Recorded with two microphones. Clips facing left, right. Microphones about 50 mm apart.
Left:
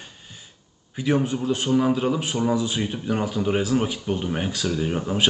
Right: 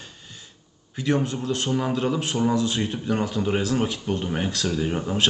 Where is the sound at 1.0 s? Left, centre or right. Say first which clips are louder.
Left 2 dB; centre.